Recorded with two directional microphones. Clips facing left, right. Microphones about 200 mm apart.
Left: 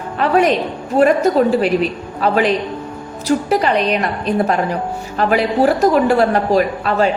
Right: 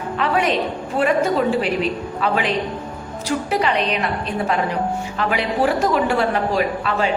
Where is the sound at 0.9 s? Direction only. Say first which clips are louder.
Left 6 dB; 40° left (ahead or behind).